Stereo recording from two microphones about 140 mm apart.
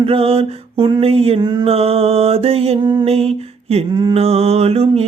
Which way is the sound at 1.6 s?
45° right (ahead or behind).